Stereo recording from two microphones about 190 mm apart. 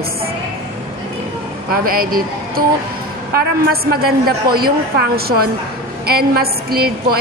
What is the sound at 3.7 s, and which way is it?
A woman's voice, 55° right (ahead or behind).